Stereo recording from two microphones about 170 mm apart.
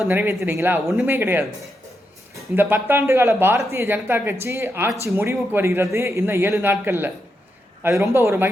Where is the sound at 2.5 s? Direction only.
10° right (ahead or behind).